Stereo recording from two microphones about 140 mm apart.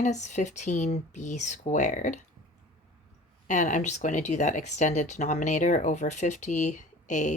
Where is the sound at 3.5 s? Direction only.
60° left (ahead or behind).